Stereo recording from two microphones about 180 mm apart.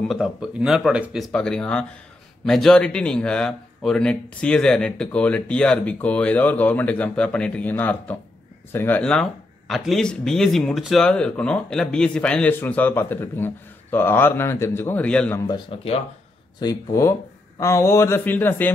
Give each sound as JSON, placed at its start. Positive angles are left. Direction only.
{"t": 0.1, "sound": "speech", "side_deg": 0}
{"t": 15.4, "sound": "speech", "side_deg": 30}